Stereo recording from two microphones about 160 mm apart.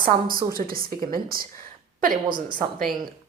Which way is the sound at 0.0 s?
65° right (ahead or behind).